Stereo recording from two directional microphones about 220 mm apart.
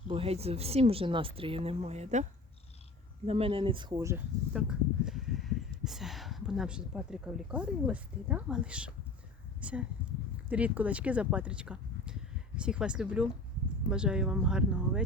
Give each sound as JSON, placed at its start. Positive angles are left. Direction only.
{"t": 0.1, "sound": "speech", "side_deg": -25}
{"t": 3.2, "sound": "speech", "side_deg": -25}